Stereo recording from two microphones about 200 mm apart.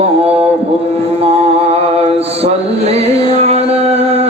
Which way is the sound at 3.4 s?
30° right (ahead or behind).